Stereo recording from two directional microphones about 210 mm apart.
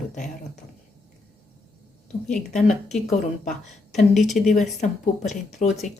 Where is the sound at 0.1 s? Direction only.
35° left (ahead or behind).